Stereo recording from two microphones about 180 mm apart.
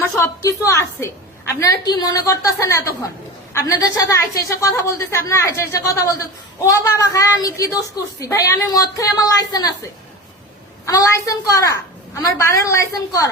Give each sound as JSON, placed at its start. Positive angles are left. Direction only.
{"t": 0.2, "sound": "a woman's voice", "side_deg": 15}
{"t": 10.8, "sound": "a woman's voice", "side_deg": 20}